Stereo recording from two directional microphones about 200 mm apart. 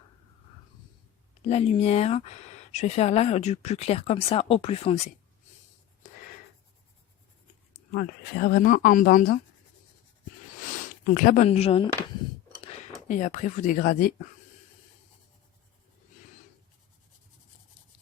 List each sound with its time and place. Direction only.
1.5 s speech: 30° left (ahead or behind)
7.9 s speech: 50° left (ahead or behind)
10.8 s a sound: 40° left (ahead or behind)
11.4 s speech: 30° left (ahead or behind)
13.1 s speech: 40° left (ahead or behind)